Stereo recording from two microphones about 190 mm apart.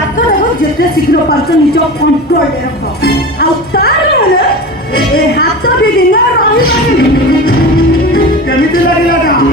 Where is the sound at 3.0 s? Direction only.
55° left (ahead or behind).